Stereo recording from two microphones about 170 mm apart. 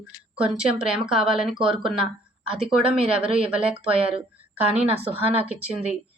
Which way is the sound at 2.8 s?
35° right (ahead or behind).